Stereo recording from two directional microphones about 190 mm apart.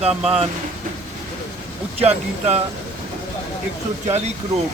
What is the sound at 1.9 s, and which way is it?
Speech, 35° right (ahead or behind).